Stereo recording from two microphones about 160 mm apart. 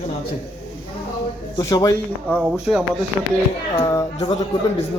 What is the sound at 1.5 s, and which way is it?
Speech, 20° left (ahead or behind).